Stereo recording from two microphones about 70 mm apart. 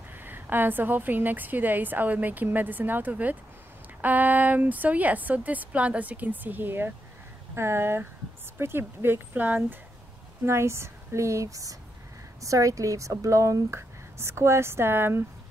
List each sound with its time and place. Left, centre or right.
0.1 s a woman's voice: right
10.4 s speech: right
13.7 s speech: right